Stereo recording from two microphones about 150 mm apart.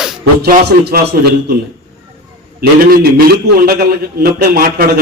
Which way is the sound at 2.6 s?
90° right.